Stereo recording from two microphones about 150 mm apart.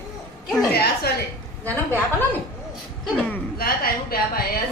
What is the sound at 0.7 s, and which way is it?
Speech, 90° left.